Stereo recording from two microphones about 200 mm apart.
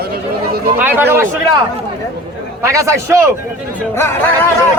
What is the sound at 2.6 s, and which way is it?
Speech, 15° right (ahead or behind).